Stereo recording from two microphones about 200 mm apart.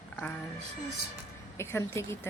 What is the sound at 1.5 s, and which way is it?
Speech, 15° left (ahead or behind).